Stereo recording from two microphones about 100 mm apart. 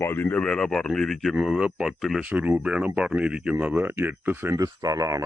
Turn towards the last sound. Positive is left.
turn(degrees=-35)  # may be behind; listen again after turning